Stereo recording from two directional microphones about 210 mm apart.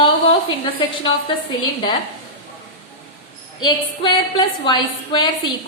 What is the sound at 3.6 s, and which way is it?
A woman's voice, 20° left (ahead or behind).